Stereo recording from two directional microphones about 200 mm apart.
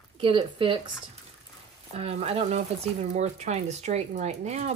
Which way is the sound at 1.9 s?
30° right (ahead or behind).